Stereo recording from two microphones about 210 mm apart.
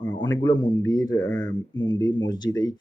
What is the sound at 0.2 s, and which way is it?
Speech, 20° left (ahead or behind).